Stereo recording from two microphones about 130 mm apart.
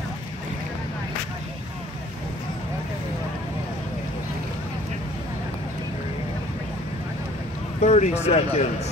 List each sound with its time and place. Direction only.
7.8 s speech: 55° left (ahead or behind)